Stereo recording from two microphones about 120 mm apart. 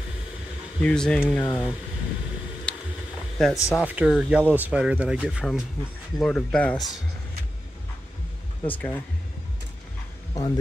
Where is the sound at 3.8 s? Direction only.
5° right (ahead or behind).